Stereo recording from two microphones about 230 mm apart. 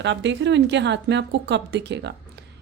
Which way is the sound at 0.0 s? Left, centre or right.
Right.